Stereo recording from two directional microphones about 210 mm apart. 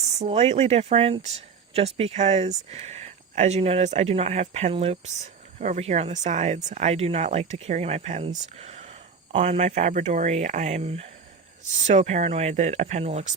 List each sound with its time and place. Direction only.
0.2 s speech: 30° right (ahead or behind)